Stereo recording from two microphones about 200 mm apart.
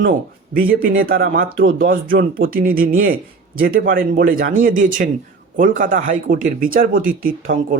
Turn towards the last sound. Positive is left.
turn(degrees=-45)  # may be behind; listen again after turning